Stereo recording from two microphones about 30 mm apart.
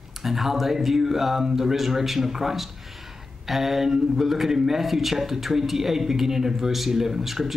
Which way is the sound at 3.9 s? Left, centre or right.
Centre.